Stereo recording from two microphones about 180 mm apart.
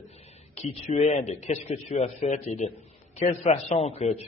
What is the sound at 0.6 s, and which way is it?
A man's voice, 40° left (ahead or behind).